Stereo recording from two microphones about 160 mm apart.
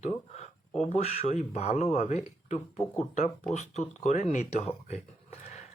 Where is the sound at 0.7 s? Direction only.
40° left (ahead or behind).